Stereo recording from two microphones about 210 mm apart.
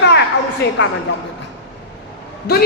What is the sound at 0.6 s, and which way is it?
Speech, 55° left (ahead or behind).